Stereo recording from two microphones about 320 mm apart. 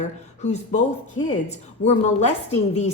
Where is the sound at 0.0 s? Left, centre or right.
Left.